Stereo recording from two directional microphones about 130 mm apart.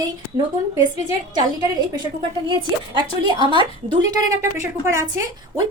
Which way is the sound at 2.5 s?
35° right (ahead or behind).